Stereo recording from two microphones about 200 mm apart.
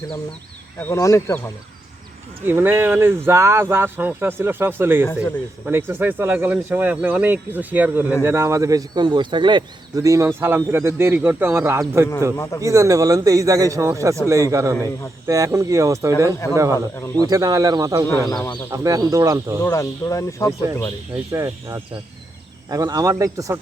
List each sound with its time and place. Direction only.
0.8 s speech: 15° left (ahead or behind)
2.4 s speech: 10° right (ahead or behind)
12.4 s speech: 15° left (ahead or behind)
12.6 s speech: 15° right (ahead or behind)
17.2 s speech: 20° right (ahead or behind)
18.1 s speech: 15° left (ahead or behind)
18.7 s speech: 15° right (ahead or behind)
19.6 s speech: 15° left (ahead or behind)
21.3 s speech: 15° right (ahead or behind)